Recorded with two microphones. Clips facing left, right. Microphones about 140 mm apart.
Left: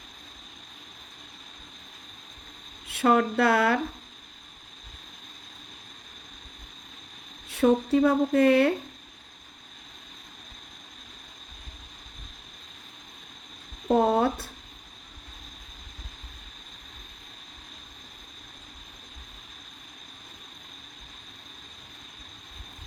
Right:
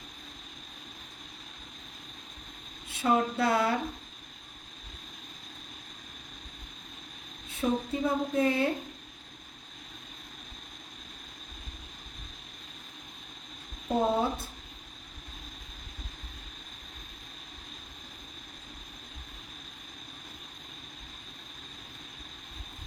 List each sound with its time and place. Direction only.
2.8 s speech: 65° left (ahead or behind)
7.4 s speech: 75° left (ahead or behind)
13.8 s a sound: 65° left (ahead or behind)